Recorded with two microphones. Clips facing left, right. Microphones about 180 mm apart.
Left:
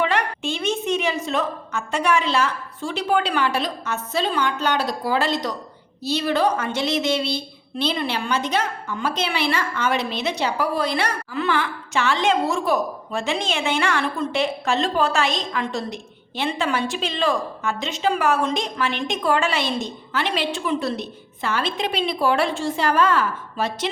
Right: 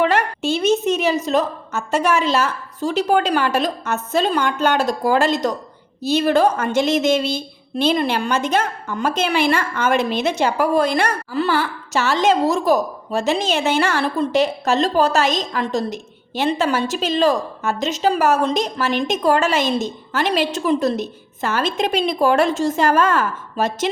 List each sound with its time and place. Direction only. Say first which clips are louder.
0.0 s a woman's voice: right 4 dB; 45° right (ahead or behind)